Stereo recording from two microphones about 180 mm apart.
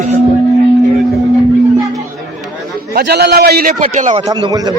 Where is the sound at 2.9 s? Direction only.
60° right (ahead or behind).